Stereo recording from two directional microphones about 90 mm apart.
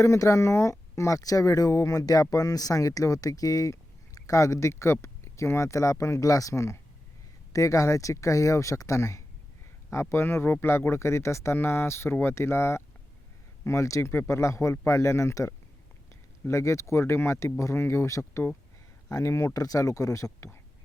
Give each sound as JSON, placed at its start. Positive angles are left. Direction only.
{"t": 0.0, "sound": "speech", "side_deg": 35}